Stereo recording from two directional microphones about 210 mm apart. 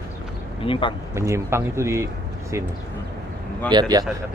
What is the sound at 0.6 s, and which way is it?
Speech, 25° left (ahead or behind).